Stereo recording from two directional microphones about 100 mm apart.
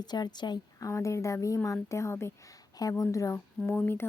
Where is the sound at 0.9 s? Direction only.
30° left (ahead or behind).